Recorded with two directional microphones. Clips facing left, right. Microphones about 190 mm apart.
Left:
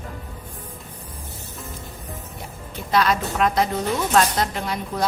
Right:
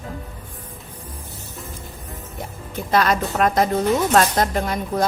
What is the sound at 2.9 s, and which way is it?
A woman's voice, 45° right (ahead or behind).